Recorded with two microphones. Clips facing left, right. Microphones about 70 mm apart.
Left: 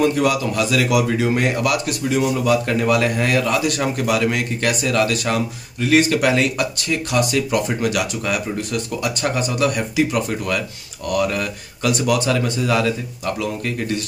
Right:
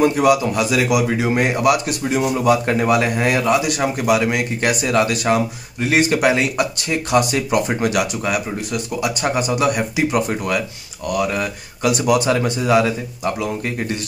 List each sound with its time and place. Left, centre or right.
0.0 s speech: centre